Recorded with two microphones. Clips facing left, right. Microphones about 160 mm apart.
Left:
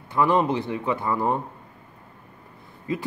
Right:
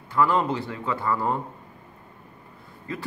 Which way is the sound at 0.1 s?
20° left (ahead or behind).